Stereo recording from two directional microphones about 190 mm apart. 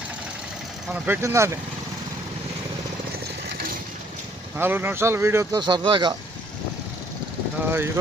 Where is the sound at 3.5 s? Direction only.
50° right (ahead or behind).